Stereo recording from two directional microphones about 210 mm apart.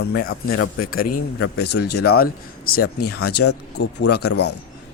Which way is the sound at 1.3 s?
90° left.